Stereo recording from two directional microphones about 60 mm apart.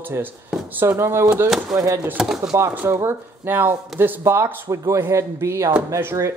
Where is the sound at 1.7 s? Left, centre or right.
Centre.